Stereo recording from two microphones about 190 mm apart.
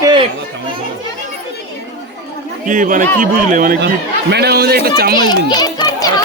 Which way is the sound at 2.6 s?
45° right (ahead or behind).